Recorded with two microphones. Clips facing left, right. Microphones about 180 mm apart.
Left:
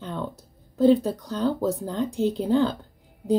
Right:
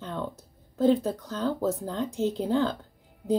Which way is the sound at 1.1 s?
15° left (ahead or behind).